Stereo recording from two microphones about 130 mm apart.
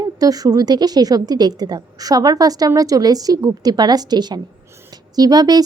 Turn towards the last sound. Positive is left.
turn(degrees=-30)  # may be behind; listen again after turning